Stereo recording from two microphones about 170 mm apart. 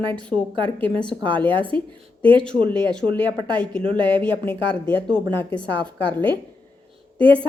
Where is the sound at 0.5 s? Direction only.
30° right (ahead or behind).